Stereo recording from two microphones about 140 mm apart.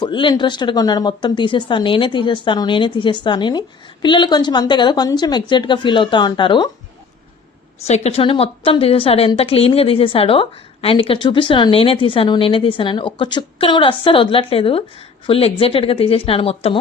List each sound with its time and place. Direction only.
0.0 s a woman's voice: 35° left (ahead or behind)
7.9 s a woman's voice: 50° left (ahead or behind)